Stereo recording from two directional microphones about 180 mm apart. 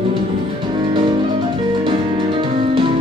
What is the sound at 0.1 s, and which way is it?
Music, 30° right (ahead or behind).